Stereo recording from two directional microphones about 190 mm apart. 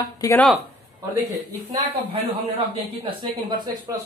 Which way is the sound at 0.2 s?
20° left (ahead or behind).